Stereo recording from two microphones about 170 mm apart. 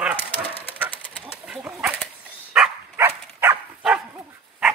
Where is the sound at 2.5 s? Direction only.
10° right (ahead or behind).